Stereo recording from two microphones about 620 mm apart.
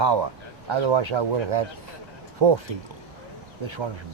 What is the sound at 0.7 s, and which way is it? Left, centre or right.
Speech, right.